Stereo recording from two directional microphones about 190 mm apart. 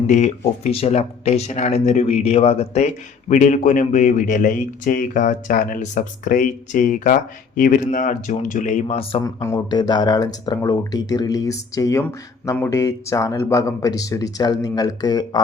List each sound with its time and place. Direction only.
0.1 s speech: 35° left (ahead or behind)
9.2 s speech: 15° left (ahead or behind)